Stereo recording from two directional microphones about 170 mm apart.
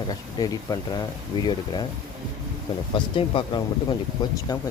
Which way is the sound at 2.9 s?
30° left (ahead or behind).